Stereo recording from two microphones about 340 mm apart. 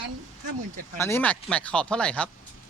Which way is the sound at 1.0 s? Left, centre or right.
Centre.